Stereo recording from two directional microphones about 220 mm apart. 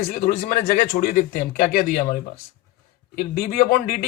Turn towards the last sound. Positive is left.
turn(degrees=40)  # may be behind; listen again after turning